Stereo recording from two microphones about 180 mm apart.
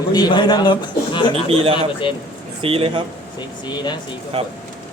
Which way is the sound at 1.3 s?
30° right (ahead or behind).